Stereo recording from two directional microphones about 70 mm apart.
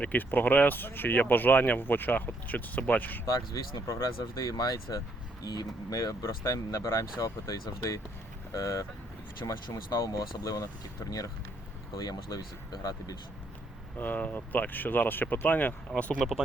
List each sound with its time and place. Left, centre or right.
0.0 s speech: left
3.2 s speech: left
4.2 s speech: left
7.8 s speech: left
11.9 s speech: left
14.0 s speech: left
16.1 s speech: centre